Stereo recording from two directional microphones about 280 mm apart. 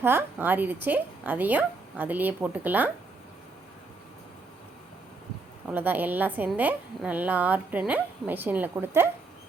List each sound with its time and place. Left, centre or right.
0.0 s a woman's voice: centre
5.6 s a woman's voice: centre